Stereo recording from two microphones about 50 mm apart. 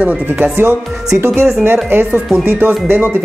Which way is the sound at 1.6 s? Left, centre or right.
Right.